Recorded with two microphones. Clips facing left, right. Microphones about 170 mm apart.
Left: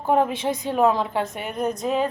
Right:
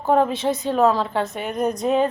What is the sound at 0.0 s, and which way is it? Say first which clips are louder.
A woman's voice: right 2 dB; 15° left (ahead or behind).